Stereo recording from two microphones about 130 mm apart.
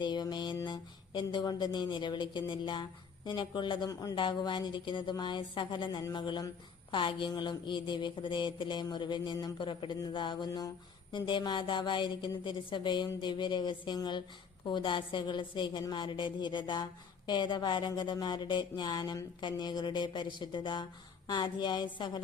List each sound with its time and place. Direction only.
0.0 s speech: 35° left (ahead or behind)